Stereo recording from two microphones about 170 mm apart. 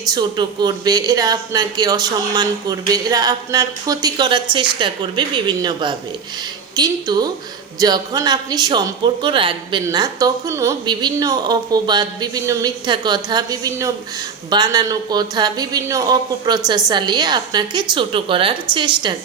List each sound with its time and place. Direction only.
0.1 s speech: 25° right (ahead or behind)